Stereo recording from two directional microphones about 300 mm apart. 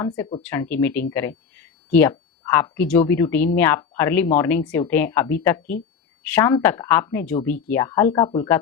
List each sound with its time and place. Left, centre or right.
0.2 s speech: centre
0.4 s speech: centre